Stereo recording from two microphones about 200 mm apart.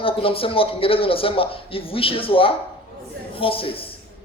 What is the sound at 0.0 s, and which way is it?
A man's voice, 25° left (ahead or behind).